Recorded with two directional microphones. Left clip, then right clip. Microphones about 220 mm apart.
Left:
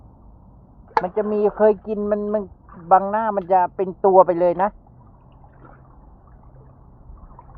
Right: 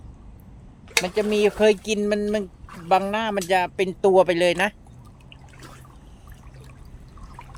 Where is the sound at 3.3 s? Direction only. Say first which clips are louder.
Left 4 dB; 20° left (ahead or behind).